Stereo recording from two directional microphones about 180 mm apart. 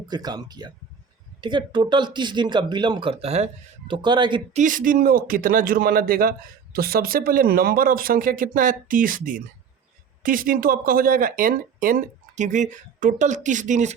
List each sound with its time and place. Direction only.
0.1 s speech: 20° right (ahead or behind)
4.5 s speech: 45° right (ahead or behind)